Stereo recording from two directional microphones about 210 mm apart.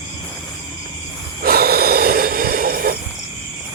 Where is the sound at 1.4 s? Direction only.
45° right (ahead or behind).